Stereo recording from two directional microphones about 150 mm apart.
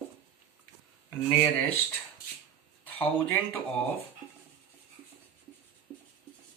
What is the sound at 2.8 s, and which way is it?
Speech, 10° left (ahead or behind).